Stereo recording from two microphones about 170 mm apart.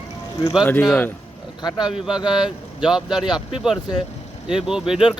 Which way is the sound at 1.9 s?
5° right (ahead or behind).